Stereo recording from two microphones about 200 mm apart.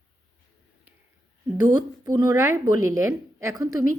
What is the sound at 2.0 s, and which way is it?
A woman's voice, 20° right (ahead or behind).